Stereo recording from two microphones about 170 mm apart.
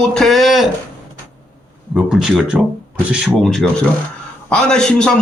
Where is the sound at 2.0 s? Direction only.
Centre (ahead or behind).